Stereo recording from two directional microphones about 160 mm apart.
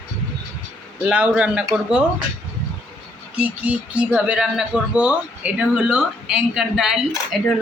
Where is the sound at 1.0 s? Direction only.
10° right (ahead or behind).